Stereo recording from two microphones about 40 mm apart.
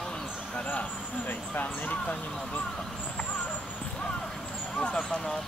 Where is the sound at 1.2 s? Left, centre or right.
Left.